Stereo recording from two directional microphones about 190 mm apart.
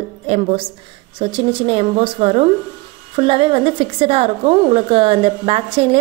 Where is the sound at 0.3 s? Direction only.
30° right (ahead or behind).